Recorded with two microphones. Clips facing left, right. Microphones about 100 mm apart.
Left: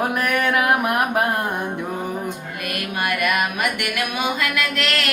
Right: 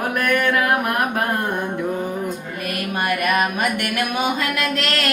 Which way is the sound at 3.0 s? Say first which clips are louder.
Right 2 dB; 40° right (ahead or behind).